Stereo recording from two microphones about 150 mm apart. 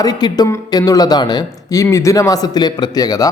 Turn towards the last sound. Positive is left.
turn(degrees=25)  # may be behind; listen again after turning